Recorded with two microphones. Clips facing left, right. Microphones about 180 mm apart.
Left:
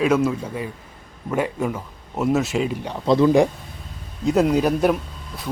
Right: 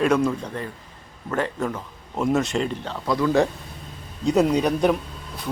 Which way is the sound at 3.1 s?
20° left (ahead or behind).